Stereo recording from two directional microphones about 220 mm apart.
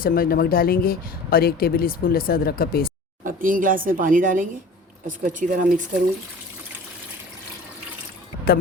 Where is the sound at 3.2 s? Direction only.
40° right (ahead or behind).